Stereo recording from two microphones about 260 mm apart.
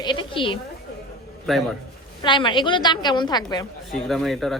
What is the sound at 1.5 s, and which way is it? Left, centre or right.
Speech, centre.